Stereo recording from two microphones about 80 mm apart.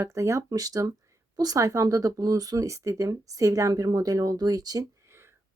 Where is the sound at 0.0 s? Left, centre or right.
Right.